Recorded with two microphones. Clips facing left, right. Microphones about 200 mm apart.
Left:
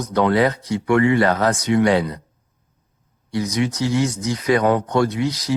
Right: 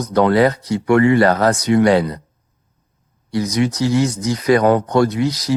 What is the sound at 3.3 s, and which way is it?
Speech, 40° right (ahead or behind).